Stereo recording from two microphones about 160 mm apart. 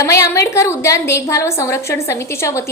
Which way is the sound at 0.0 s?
20° left (ahead or behind).